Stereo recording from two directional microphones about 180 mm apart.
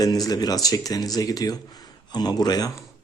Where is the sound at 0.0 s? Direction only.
20° left (ahead or behind).